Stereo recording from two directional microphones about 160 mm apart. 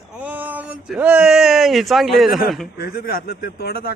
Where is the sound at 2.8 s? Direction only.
75° left (ahead or behind).